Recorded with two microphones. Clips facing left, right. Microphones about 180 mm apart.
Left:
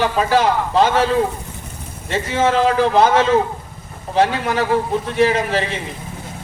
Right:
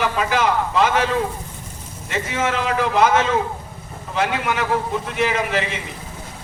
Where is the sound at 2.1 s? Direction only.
30° left (ahead or behind).